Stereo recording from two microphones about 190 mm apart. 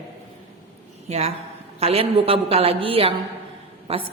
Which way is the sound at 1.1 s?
35° right (ahead or behind).